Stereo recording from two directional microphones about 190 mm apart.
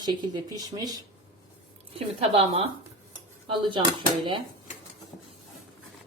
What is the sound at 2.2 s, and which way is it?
Speech, 30° right (ahead or behind).